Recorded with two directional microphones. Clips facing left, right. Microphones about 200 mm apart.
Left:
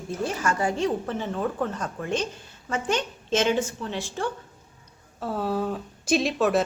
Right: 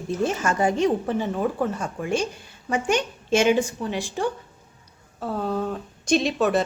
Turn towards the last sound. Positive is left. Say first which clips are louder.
# right 1 dB
turn(degrees=0)  # may be behind; listen again after turning